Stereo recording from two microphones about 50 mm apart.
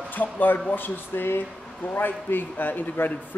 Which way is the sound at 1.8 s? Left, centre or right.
Left.